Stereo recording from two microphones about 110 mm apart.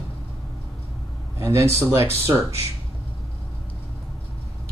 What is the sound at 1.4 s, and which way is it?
Speech, 25° right (ahead or behind).